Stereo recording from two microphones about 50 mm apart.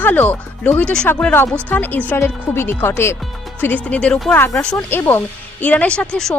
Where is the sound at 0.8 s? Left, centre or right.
Centre.